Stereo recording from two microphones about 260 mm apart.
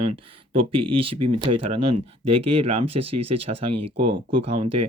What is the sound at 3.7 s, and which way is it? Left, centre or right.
Speech, right.